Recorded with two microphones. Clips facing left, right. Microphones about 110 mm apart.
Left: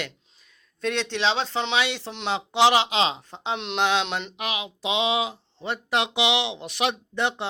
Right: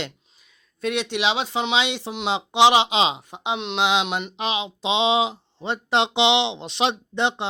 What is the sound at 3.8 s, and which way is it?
Speech, 15° right (ahead or behind).